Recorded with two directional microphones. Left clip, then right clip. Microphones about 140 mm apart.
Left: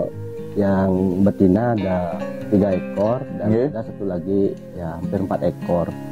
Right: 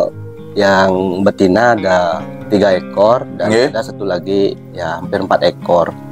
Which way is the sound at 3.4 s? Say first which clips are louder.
Right 8 dB; 15° right (ahead or behind).